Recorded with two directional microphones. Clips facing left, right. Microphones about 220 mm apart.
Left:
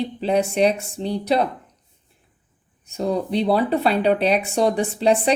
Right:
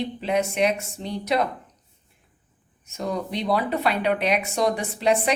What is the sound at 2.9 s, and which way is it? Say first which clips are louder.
Speech: left 6 dB; 30° left (ahead or behind).